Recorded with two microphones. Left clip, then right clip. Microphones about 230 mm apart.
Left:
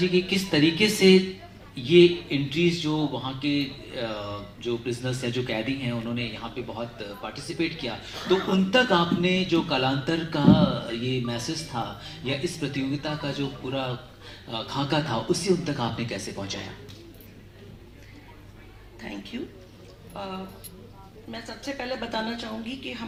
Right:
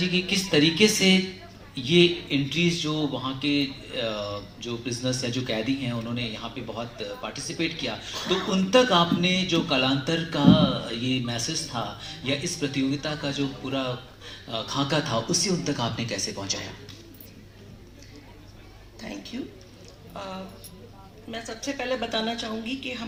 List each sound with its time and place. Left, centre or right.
0.0 s speech: right
19.3 s speech: right
21.2 s speech: right